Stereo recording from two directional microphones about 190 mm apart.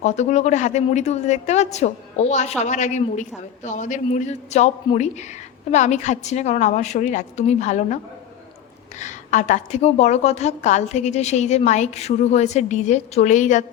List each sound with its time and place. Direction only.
0.0 s a woman's voice: 35° left (ahead or behind)
9.0 s a woman's voice: 40° left (ahead or behind)